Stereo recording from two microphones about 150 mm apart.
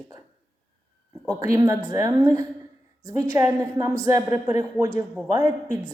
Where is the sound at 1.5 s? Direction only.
20° right (ahead or behind).